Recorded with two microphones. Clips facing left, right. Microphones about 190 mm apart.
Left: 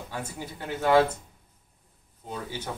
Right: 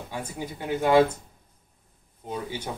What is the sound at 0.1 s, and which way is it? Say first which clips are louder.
Speech: right 3 dB; 10° right (ahead or behind).